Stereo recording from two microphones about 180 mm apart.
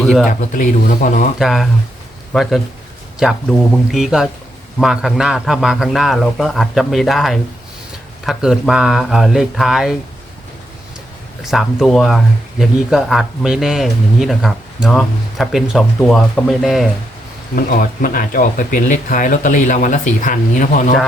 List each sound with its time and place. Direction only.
0.0 s speech: centre (ahead or behind)
0.3 s speech: 50° left (ahead or behind)
1.4 s speech: centre (ahead or behind)
11.4 s speech: centre (ahead or behind)
17.5 s speech: 50° left (ahead or behind)